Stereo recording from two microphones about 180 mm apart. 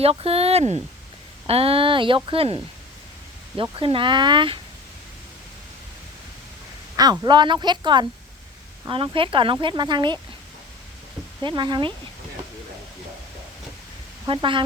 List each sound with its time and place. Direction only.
0.0 s speech: 35° right (ahead or behind)
3.6 s speech: 30° right (ahead or behind)
6.9 s speech: 20° right (ahead or behind)
11.4 s speech: 25° right (ahead or behind)
14.3 s speech: 30° right (ahead or behind)